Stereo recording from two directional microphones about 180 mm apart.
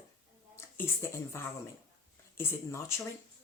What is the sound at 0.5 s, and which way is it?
Speech, 15° left (ahead or behind).